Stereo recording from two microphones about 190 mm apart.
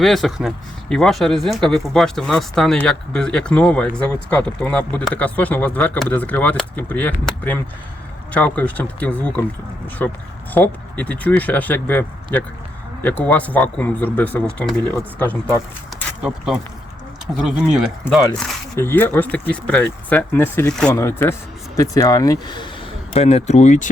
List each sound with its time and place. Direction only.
0.0 s speech: centre (ahead or behind)
10.5 s speech: 10° left (ahead or behind)
17.3 s speech: 5° right (ahead or behind)
18.8 s speech: 10° left (ahead or behind)
23.1 s speech: 35° left (ahead or behind)